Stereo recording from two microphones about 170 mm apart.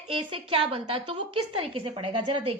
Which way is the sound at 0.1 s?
30° right (ahead or behind).